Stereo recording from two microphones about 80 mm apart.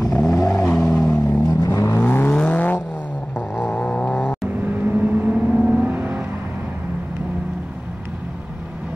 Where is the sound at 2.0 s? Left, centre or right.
Left.